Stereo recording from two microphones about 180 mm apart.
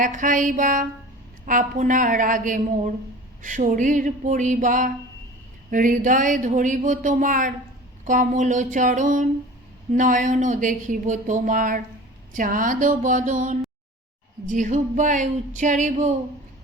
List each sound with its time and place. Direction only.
0.0 s speech: 45° right (ahead or behind)